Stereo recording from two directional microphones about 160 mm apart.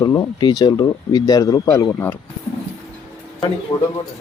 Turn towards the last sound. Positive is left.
turn(degrees=20)  # may be behind; listen again after turning